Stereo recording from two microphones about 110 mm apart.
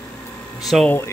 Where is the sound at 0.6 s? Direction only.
Centre (ahead or behind).